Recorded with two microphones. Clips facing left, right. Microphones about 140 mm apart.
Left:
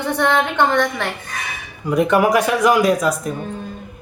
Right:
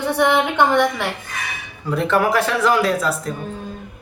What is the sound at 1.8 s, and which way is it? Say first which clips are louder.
Speech: left 3 dB; 15° left (ahead or behind).